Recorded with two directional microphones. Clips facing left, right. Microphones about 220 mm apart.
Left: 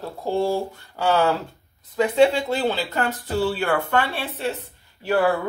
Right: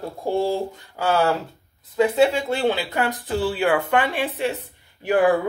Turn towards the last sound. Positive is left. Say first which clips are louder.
# right 2 dB
turn(degrees=-15)  # may be behind; listen again after turning